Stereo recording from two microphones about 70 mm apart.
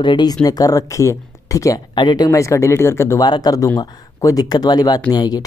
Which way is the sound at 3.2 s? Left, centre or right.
Left.